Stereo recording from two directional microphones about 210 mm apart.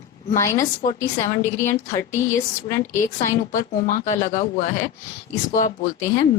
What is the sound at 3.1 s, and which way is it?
A woman's voice, 35° left (ahead or behind).